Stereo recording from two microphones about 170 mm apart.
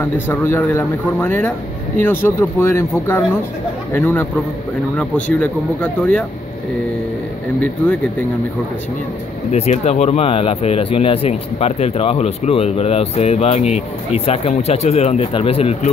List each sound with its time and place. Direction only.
0.0 s speech: 10° left (ahead or behind)
3.9 s speech: 10° left (ahead or behind)
9.5 s speech: 40° left (ahead or behind)